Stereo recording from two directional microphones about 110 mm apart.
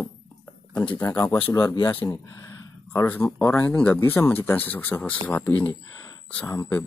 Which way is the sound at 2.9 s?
20° left (ahead or behind).